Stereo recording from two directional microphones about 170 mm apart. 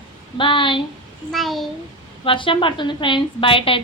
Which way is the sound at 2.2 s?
30° left (ahead or behind).